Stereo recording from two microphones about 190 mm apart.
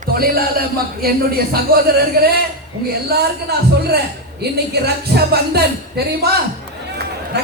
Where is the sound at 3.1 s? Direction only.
55° right (ahead or behind).